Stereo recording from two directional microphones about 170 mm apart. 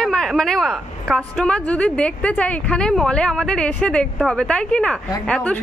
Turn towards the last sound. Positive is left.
turn(degrees=5)  # may be behind; listen again after turning